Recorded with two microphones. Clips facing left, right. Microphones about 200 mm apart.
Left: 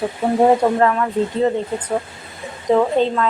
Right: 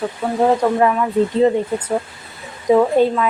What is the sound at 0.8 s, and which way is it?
Speech, 10° right (ahead or behind).